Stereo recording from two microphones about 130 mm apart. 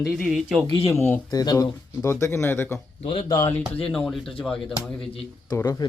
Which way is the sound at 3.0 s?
50° left (ahead or behind).